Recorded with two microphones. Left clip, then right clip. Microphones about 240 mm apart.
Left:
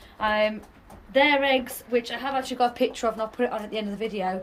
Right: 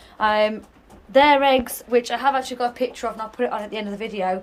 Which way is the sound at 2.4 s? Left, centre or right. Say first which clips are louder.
Even; centre.